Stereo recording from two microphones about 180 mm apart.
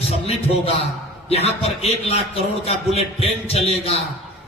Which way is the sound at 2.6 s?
35° left (ahead or behind).